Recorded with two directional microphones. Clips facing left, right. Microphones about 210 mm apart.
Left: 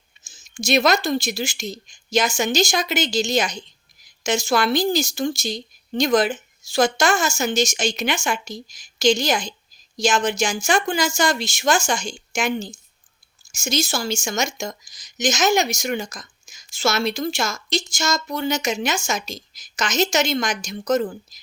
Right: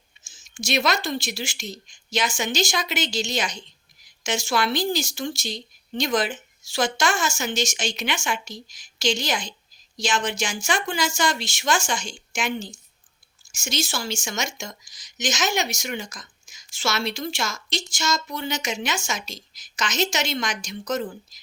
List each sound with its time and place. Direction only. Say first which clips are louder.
0.3 s speech: left 6 dB; 40° left (ahead or behind)